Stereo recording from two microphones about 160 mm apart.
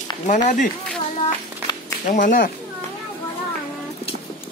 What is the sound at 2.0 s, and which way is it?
Speech, 55° left (ahead or behind).